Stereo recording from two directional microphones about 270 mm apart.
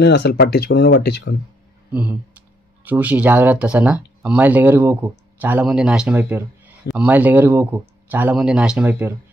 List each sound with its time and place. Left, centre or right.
0.0 s speech: left
1.9 s speech: centre